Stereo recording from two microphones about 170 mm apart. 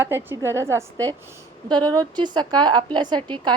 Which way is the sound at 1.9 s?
25° right (ahead or behind).